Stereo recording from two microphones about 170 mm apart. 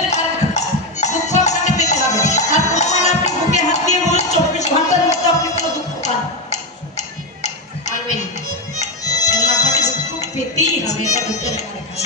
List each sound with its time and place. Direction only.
0.1 s music: 40° left (ahead or behind)
5.6 s tick-tock: 40° left (ahead or behind)
8.8 s music: 20° left (ahead or behind)
9.8 s music: 45° left (ahead or behind)